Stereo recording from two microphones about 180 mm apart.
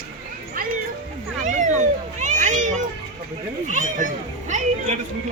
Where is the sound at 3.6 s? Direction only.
45° right (ahead or behind).